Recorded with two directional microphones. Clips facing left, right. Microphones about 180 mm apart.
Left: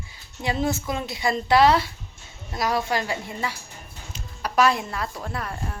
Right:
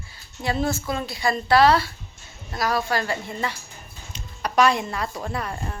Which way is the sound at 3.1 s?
10° left (ahead or behind).